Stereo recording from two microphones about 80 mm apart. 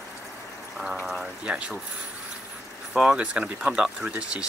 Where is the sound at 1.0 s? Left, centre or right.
Centre.